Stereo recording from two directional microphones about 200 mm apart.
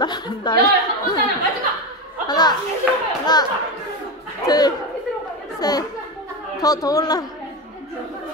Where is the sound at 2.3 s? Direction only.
20° left (ahead or behind).